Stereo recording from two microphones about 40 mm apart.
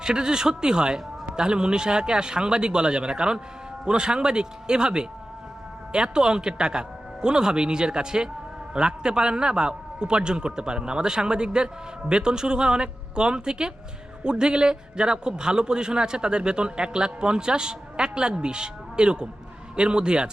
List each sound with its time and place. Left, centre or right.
0.0 s a man's voice: centre